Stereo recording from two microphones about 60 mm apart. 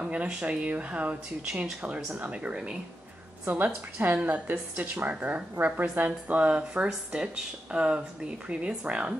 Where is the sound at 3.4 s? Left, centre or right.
Right.